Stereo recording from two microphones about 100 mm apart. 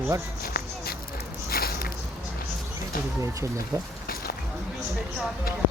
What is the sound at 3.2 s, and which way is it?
Speech, 30° right (ahead or behind).